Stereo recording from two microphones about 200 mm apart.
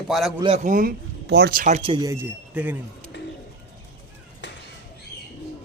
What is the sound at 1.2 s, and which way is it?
A man's voice, 55° right (ahead or behind).